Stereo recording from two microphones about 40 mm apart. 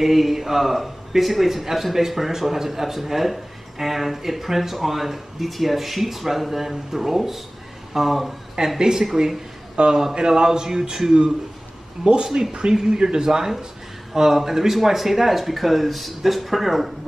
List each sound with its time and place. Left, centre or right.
0.0 s a man's voice: centre
8.5 s a man's voice: centre
12.0 s a man's voice: right; by 16.9 s centre